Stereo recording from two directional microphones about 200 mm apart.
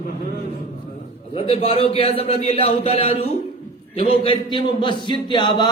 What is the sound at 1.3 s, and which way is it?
Speech, 30° left (ahead or behind).